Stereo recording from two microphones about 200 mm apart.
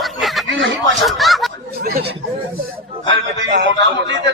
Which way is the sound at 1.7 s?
50° right (ahead or behind).